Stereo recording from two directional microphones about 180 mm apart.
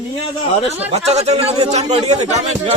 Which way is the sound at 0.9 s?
35° right (ahead or behind).